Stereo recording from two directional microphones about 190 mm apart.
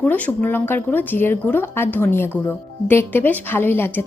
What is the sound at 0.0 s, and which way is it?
A woman's voice, 10° left (ahead or behind).